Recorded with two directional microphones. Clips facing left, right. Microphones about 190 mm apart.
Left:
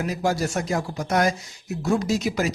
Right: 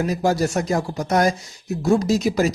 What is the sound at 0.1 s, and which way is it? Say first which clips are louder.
Speech: right 4 dB; 40° right (ahead or behind).